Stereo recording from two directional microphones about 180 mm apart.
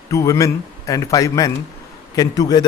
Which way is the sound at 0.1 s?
15° left (ahead or behind).